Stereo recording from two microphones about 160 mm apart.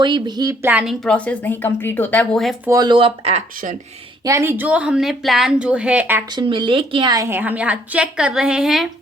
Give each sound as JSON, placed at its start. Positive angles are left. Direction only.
{"t": 0.0, "sound": "a woman's voice", "side_deg": -25}
{"t": 0.6, "sound": "a woman's voice", "side_deg": -10}
{"t": 1.0, "sound": "speech", "side_deg": 10}
{"t": 2.6, "sound": "speech", "side_deg": -25}
{"t": 4.2, "sound": "a woman's voice", "side_deg": -20}
{"t": 6.3, "sound": "a woman's voice", "side_deg": -30}